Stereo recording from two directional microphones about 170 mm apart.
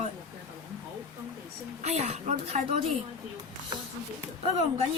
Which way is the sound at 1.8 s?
40° right (ahead or behind).